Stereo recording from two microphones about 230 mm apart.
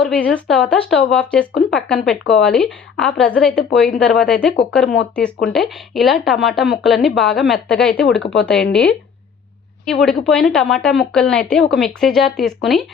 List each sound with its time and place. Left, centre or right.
0.0 s speech: centre
8.2 s speech: left
8.7 s speech: centre